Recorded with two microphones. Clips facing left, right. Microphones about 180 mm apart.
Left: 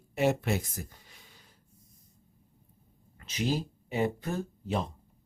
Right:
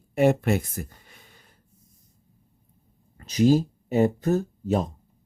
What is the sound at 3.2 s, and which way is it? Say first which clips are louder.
Speech: right 12 dB; 40° right (ahead or behind).